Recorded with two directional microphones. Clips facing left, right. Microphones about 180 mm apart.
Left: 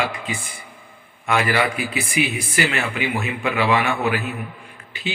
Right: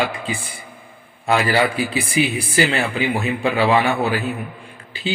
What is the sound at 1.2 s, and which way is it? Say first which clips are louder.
Speech: right 3 dB; 30° right (ahead or behind).